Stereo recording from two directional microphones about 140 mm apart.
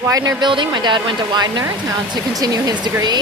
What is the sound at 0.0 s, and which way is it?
A woman's voice, 25° right (ahead or behind).